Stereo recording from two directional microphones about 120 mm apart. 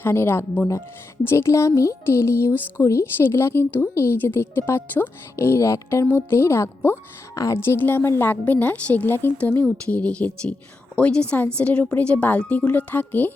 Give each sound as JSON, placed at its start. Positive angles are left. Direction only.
{"t": 0.0, "sound": "a woman's voice", "side_deg": 20}